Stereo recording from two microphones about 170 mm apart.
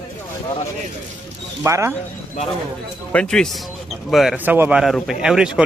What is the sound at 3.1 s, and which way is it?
A man's voice, 5° left (ahead or behind).